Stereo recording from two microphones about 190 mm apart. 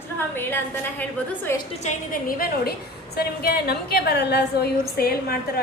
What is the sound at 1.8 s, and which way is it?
A woman's voice, 45° left (ahead or behind).